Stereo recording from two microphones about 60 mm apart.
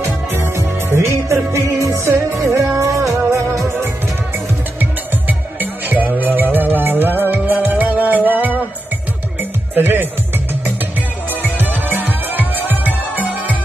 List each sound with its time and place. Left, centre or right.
0.0 s music: right
4.7 s music: right